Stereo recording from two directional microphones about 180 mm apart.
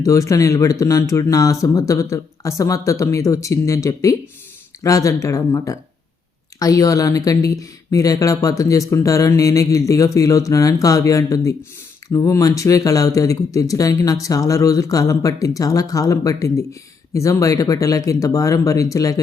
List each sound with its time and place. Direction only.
0.0 s speech: 15° left (ahead or behind)